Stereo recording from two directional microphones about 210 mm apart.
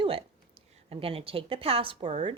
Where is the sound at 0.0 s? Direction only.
25° right (ahead or behind).